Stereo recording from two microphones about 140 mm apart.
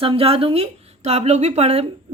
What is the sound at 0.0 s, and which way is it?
Speech, 40° right (ahead or behind).